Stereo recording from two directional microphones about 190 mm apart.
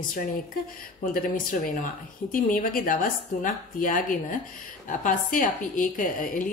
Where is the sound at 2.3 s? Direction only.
45° left (ahead or behind).